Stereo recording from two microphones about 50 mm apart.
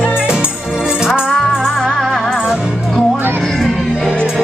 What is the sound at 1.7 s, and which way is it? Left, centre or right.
Music, centre.